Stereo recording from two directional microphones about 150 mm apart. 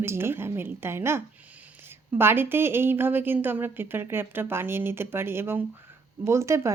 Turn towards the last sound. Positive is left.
turn(degrees=-20)  # may be behind; listen again after turning